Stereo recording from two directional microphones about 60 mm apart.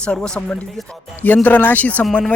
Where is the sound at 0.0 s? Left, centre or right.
Centre.